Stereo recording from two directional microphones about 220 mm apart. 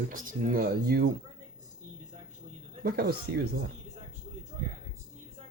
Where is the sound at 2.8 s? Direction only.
45° right (ahead or behind).